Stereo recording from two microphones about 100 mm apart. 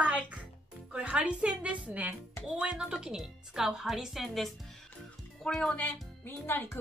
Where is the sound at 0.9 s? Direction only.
10° right (ahead or behind).